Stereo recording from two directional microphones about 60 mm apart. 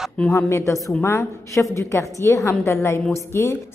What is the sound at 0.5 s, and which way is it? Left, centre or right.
A woman's voice, left.